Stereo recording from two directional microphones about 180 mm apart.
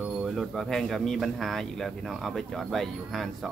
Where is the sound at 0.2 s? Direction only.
Centre (ahead or behind).